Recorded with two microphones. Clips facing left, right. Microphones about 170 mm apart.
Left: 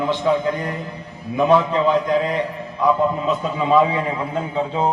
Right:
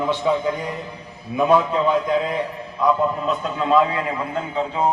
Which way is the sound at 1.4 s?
5° right (ahead or behind).